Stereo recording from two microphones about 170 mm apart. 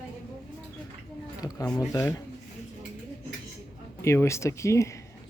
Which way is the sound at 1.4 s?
20° left (ahead or behind).